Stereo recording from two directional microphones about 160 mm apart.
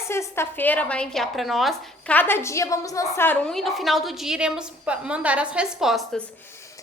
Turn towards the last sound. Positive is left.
turn(degrees=0)  # may be behind; listen again after turning